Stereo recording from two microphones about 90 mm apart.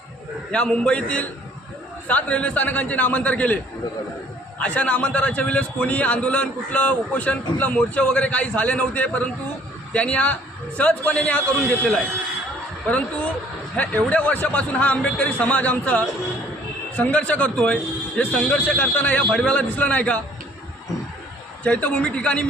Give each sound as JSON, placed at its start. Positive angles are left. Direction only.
{"t": 0.5, "sound": "a man's voice", "side_deg": 10}
{"t": 4.6, "sound": "a man's voice", "side_deg": 15}
{"t": 21.6, "sound": "a man's voice", "side_deg": 15}